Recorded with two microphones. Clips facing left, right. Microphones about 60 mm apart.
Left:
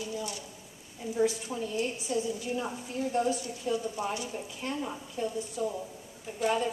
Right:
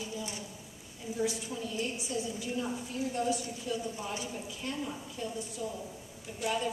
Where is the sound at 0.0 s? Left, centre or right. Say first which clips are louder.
Left 3 dB; right.